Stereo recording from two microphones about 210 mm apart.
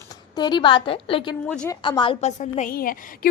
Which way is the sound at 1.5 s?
5° left (ahead or behind).